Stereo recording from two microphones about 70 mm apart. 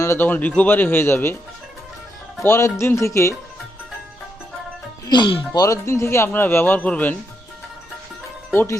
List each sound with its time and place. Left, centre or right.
0.0 s speech: left
0.3 s speech: left
2.4 s speech: left
5.0 s speech: left
5.5 s speech: left
6.7 s speech: centre